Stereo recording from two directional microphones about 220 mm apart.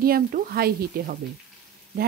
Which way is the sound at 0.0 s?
40° right (ahead or behind).